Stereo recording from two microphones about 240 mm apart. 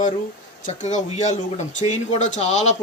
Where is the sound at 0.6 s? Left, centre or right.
Left.